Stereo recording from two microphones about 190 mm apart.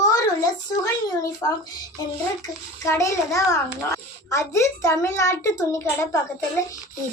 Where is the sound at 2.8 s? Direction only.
15° left (ahead or behind).